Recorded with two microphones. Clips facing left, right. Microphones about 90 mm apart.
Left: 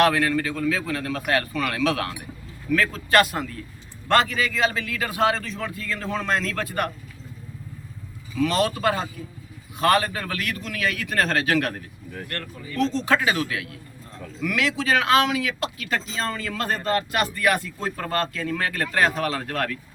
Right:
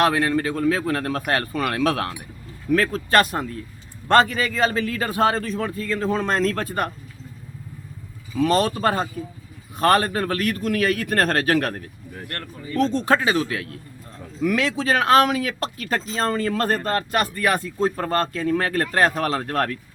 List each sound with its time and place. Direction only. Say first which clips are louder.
0.0 s speech: right 1 dB; 30° right (ahead or behind)
8.4 s speech: right 3 dB; 35° right (ahead or behind)
13.2 s speech: right 2 dB; 30° right (ahead or behind)